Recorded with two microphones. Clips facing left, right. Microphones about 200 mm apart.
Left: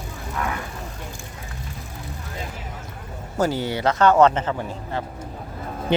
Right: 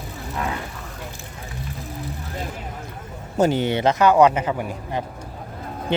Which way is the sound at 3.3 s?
20° right (ahead or behind).